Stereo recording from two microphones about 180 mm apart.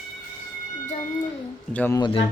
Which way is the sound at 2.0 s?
30° left (ahead or behind).